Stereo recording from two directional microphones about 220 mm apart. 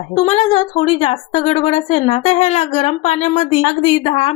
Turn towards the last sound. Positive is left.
turn(degrees=25)  # may be behind; listen again after turning